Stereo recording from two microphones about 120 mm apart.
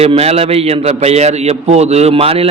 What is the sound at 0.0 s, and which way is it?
A man's voice, 60° right (ahead or behind).